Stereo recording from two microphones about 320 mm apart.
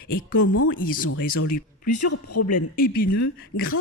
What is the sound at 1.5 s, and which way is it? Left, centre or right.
Speech, left.